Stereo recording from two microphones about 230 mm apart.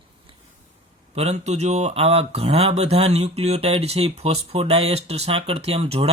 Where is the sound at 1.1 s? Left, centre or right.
Right.